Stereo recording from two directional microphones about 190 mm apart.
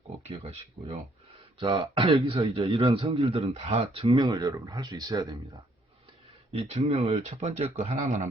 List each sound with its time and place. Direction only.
0.3 s a man's voice: 30° right (ahead or behind)
4.2 s speech: 20° right (ahead or behind)
6.5 s a man's voice: 35° right (ahead or behind)